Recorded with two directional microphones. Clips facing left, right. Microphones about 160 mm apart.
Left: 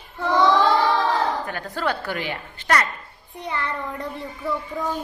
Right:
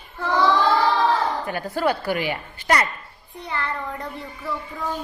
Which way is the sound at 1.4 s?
10° right (ahead or behind).